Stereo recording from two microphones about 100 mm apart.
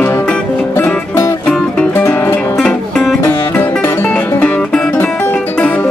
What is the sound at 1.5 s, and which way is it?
Music, 10° left (ahead or behind).